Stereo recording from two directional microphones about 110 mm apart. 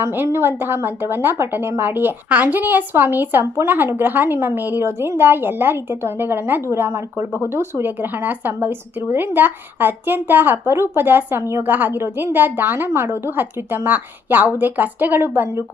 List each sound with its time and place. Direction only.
0.0 s a woman's voice: 20° right (ahead or behind)